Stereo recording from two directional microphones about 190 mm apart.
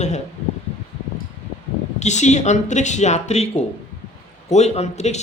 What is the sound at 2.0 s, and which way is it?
Speech, 35° left (ahead or behind).